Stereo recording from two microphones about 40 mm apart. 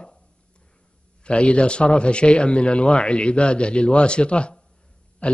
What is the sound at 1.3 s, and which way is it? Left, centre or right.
A man's voice, left.